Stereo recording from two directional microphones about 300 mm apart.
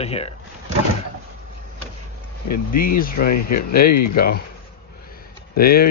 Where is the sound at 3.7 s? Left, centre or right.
Left.